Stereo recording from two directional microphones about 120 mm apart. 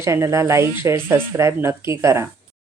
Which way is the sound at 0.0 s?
25° right (ahead or behind).